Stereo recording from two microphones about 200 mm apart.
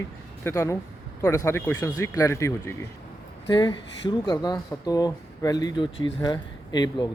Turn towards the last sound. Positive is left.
turn(degrees=20)  # may be behind; listen again after turning